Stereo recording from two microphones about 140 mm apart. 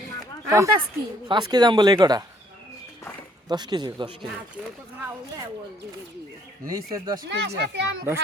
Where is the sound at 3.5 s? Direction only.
30° right (ahead or behind).